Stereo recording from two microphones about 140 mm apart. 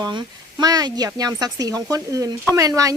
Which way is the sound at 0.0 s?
30° right (ahead or behind).